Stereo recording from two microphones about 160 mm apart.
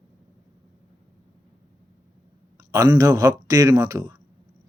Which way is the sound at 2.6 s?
20° right (ahead or behind).